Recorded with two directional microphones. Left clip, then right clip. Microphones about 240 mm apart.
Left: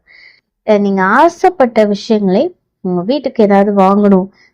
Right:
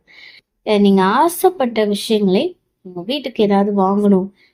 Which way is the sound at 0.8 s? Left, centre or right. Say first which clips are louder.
Left 3 dB; left.